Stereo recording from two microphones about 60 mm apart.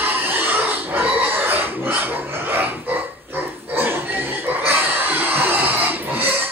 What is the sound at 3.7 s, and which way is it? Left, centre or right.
Pig, right.